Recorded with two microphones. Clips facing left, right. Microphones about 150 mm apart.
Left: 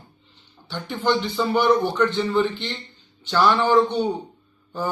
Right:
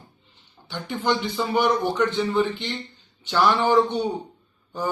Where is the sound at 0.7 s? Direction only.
15° right (ahead or behind).